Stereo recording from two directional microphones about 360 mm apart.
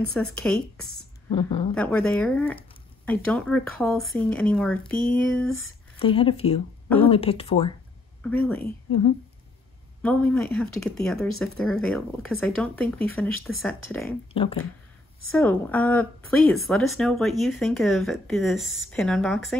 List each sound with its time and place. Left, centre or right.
0.1 s a woman's voice: centre
1.3 s speech: centre
1.8 s a woman's voice: centre
5.9 s speech: centre
8.2 s a woman's voice: centre
10.0 s a woman's voice: centre
14.3 s speech: centre
15.3 s a woman's voice: centre